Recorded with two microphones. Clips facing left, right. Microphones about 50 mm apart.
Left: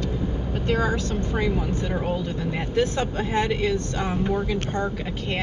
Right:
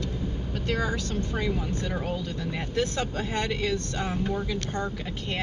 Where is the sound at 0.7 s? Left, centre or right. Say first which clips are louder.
Left 5 dB; left.